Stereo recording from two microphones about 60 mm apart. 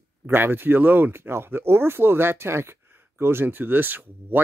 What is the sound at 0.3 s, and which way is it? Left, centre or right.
Speech, right.